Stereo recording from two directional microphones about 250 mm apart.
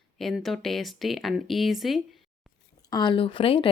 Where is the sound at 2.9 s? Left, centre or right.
Centre.